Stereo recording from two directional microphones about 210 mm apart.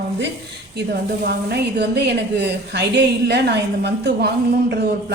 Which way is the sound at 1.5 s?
50° right (ahead or behind).